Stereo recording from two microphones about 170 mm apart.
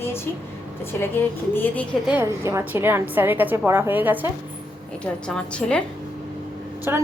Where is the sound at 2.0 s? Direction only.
15° right (ahead or behind).